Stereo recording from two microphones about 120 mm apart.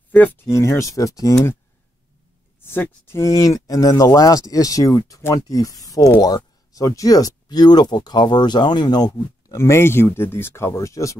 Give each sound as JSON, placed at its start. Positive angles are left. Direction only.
{"t": 0.1, "sound": "speech", "side_deg": 15}
{"t": 0.6, "sound": "speech", "side_deg": 25}
{"t": 2.6, "sound": "speech", "side_deg": 20}